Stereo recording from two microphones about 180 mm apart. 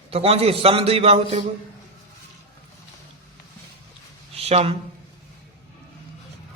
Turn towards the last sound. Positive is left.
turn(degrees=-35)  # may be behind; listen again after turning